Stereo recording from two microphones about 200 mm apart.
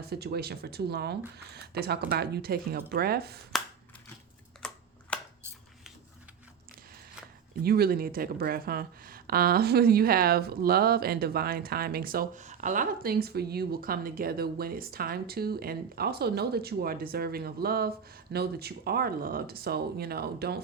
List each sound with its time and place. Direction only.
0.1 s a woman's voice: 50° right (ahead or behind)
3.5 s a sound: centre (ahead or behind)
7.6 s a woman's voice: 50° right (ahead or behind)